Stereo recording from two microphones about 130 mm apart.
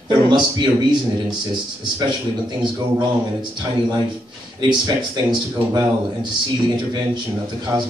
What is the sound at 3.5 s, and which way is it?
A man's voice, 35° right (ahead or behind).